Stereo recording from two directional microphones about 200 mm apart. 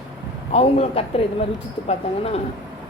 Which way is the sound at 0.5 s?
30° left (ahead or behind).